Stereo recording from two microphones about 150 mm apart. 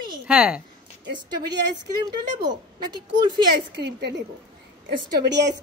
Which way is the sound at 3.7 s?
90° right.